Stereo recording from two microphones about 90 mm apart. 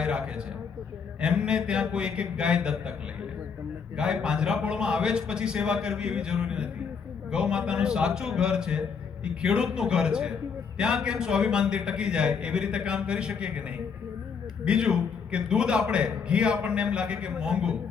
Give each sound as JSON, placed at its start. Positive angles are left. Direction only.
{"t": 0.0, "sound": "a man's voice", "side_deg": -10}
{"t": 3.9, "sound": "a man's voice", "side_deg": -10}
{"t": 14.6, "sound": "a man's voice", "side_deg": -10}